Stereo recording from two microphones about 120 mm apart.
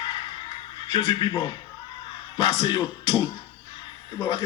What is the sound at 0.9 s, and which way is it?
A man's voice, 40° left (ahead or behind).